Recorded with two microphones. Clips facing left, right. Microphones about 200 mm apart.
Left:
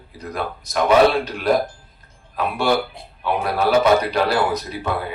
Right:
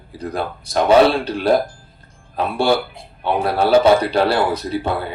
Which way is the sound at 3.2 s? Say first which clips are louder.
Right 2 dB; 30° right (ahead or behind).